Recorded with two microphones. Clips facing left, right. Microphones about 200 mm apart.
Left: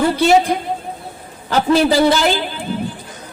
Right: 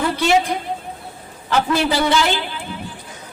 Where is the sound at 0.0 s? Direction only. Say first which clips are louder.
Left 5 dB; 35° left (ahead or behind).